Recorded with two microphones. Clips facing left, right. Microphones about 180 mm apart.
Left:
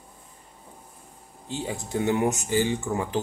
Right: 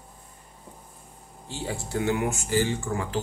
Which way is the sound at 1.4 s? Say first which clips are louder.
Left 1 dB; 20° left (ahead or behind).